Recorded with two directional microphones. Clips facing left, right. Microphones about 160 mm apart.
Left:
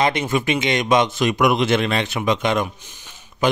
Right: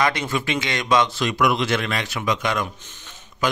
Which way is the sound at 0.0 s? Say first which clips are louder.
Left 3 dB; 25° left (ahead or behind).